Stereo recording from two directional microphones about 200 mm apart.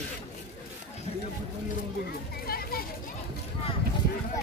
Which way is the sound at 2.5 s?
50° left (ahead or behind).